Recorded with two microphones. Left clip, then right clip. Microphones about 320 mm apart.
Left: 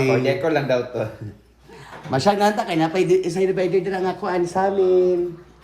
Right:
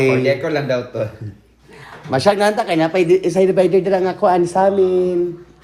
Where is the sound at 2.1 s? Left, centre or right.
Centre.